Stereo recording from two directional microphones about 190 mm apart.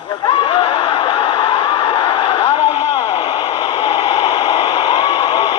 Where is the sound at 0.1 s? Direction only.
20° left (ahead or behind).